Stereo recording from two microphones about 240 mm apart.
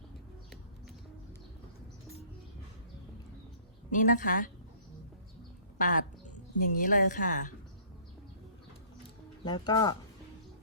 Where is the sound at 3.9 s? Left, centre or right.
Left.